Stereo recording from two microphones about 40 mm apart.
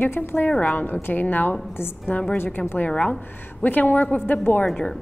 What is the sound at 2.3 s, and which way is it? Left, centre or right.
Speech, left.